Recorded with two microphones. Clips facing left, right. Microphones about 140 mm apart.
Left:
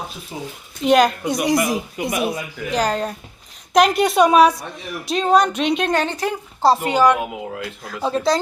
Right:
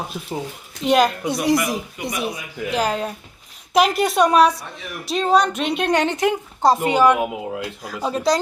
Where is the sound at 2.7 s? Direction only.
5° right (ahead or behind).